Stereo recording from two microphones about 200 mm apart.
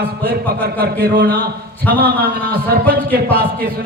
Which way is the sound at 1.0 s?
45° right (ahead or behind).